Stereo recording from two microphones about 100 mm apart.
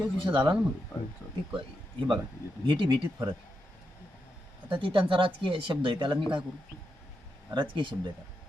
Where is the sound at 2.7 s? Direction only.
55° right (ahead or behind).